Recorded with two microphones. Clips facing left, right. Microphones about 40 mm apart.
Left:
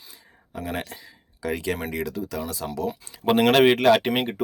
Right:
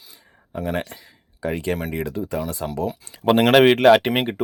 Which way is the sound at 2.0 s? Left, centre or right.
Right.